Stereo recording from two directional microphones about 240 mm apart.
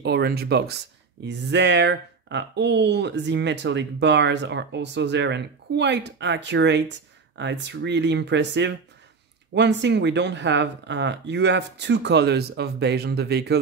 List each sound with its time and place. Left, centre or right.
0.0 s speech: right